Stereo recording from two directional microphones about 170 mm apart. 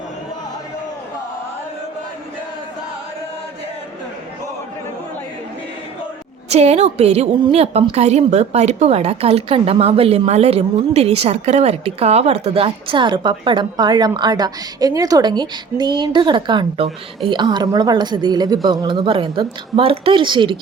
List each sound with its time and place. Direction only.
6.5 s a woman's voice: 40° right (ahead or behind)